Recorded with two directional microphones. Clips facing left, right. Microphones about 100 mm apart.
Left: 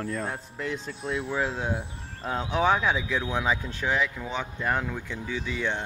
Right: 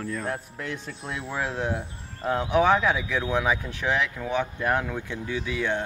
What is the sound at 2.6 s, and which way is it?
Speech, 10° left (ahead or behind).